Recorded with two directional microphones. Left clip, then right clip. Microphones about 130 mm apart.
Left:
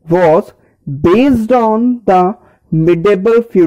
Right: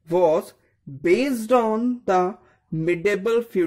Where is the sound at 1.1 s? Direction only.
50° left (ahead or behind).